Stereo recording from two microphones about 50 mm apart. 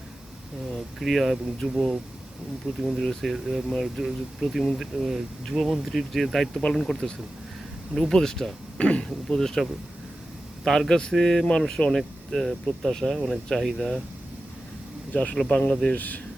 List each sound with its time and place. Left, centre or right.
0.9 s speech: centre
6.6 s speech: centre
8.8 s speech: left
9.0 s speech: centre
15.1 s speech: left
15.7 s speech: centre
16.0 s speech: left